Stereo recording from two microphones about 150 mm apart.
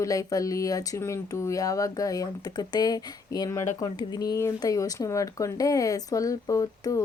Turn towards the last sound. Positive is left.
turn(degrees=20)  # may be behind; listen again after turning